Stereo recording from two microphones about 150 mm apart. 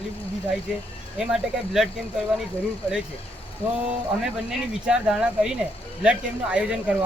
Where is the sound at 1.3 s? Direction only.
5° right (ahead or behind).